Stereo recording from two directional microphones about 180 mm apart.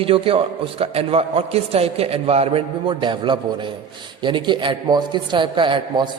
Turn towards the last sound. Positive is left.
turn(degrees=-25)  # may be behind; listen again after turning